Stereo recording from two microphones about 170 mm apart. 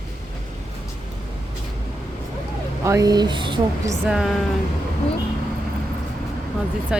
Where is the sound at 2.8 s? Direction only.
20° right (ahead or behind).